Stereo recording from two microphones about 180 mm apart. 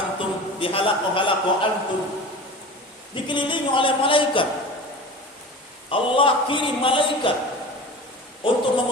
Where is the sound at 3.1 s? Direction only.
25° left (ahead or behind).